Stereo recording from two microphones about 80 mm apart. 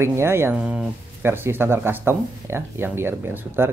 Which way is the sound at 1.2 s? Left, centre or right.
Right.